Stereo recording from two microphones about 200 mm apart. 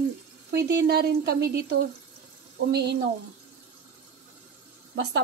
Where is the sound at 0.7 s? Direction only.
55° right (ahead or behind).